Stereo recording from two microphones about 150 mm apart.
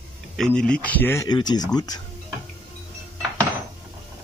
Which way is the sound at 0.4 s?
5° left (ahead or behind).